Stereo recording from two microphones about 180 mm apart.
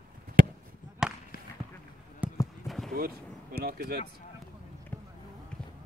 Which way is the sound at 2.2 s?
10° right (ahead or behind).